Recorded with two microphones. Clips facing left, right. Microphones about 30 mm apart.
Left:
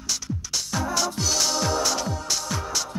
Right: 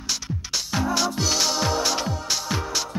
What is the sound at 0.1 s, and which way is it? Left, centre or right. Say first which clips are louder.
Music: right 1 dB; centre.